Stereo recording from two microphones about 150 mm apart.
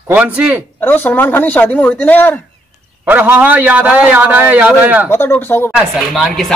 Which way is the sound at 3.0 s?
10° right (ahead or behind).